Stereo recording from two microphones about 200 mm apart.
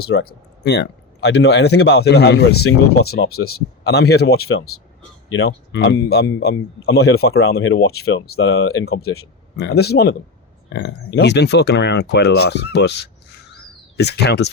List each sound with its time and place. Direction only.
0.0 s speech: 50° left (ahead or behind)
4.4 s speech: 90° left
5.3 s speech: 55° left (ahead or behind)
8.7 s speech: 90° left
9.6 s speech: 55° left (ahead or behind)